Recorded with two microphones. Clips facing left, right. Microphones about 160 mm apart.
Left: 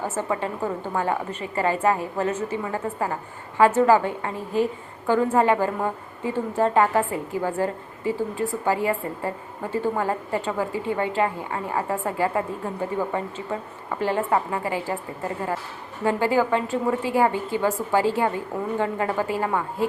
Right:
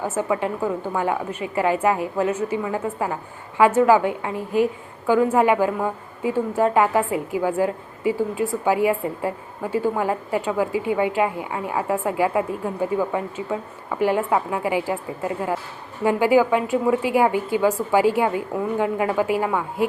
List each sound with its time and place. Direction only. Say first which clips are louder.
0.2 s a woman's voice: right 4 dB; 10° right (ahead or behind)